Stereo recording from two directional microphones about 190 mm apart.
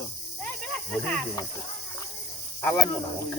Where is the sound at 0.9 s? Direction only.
Centre (ahead or behind).